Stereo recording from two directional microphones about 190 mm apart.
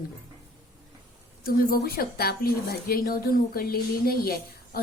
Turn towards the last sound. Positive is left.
turn(degrees=50)  # may be behind; listen again after turning